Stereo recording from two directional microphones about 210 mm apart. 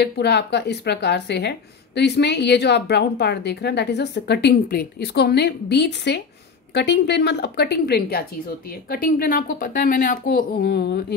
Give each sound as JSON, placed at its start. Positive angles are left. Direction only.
{"t": 0.0, "sound": "speech", "side_deg": 55}